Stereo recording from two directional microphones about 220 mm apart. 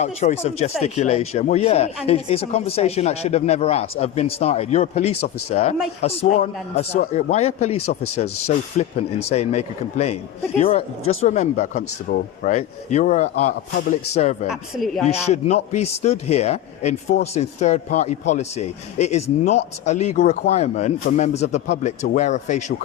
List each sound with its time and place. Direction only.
0.0 s speech: 30° left (ahead or behind)
7.8 s speech: 85° left
8.8 s speech: 30° left (ahead or behind)
14.4 s a man's voice: centre (ahead or behind)
15.0 s speech: 30° left (ahead or behind)